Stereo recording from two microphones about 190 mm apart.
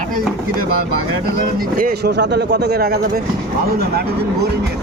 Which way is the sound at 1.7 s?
55° right (ahead or behind).